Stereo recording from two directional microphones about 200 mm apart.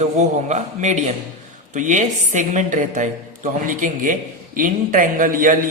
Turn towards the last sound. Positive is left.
turn(degrees=-45)  # may be behind; listen again after turning